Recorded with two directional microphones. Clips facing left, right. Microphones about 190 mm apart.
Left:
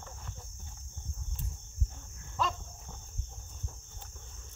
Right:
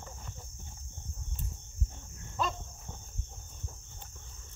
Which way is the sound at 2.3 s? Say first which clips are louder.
Even; 15° right (ahead or behind).